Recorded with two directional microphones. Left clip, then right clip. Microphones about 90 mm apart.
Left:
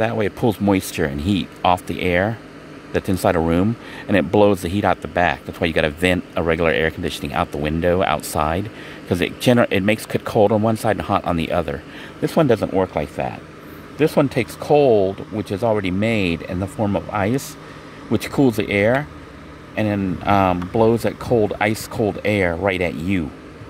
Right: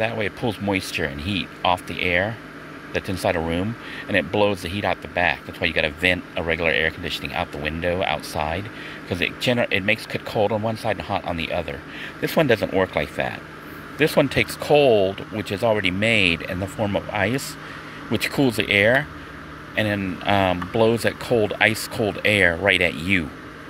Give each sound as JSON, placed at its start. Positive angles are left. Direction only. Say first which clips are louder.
{"t": 0.0, "sound": "speech", "louder": "left 4 dB", "side_deg": 70}
{"t": 2.9, "sound": "speech", "louder": "left 4 dB", "side_deg": 90}
{"t": 3.3, "sound": "speech", "louder": "left 6 dB", "side_deg": 65}
{"t": 4.1, "sound": "speech", "louder": "left 5 dB", "side_deg": 90}
{"t": 12.6, "sound": "speech", "louder": "left 1 dB", "side_deg": 15}